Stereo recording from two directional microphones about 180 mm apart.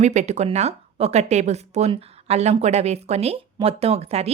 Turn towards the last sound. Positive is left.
turn(degrees=-35)  # may be behind; listen again after turning